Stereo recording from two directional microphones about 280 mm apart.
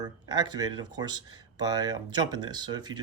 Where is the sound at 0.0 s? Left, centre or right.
Centre.